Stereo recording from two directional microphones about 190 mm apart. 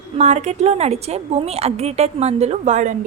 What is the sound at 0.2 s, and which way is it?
A woman's voice, 35° right (ahead or behind).